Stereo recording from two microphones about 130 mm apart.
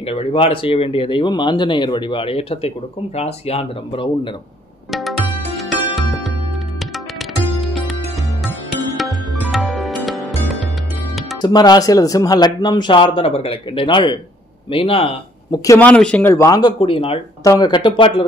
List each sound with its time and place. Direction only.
0.0 s speech: 45° left (ahead or behind)
5.6 s music: centre (ahead or behind)
9.5 s music: centre (ahead or behind)
11.4 s speech: 30° left (ahead or behind)
15.5 s speech: 25° left (ahead or behind)
15.8 s speech: 10° left (ahead or behind)
16.3 s speech: 25° left (ahead or behind)
16.8 s speech: 45° left (ahead or behind)
17.4 s speech: 25° left (ahead or behind)
17.6 s speech: 40° left (ahead or behind)